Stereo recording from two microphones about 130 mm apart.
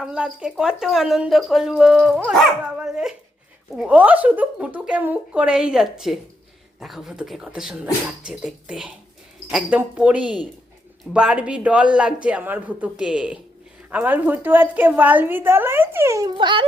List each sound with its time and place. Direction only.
0.0 s a woman's voice: 10° right (ahead or behind)
16.3 s speech: 35° right (ahead or behind)